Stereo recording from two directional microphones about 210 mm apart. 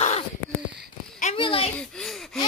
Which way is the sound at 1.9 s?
Centre (ahead or behind).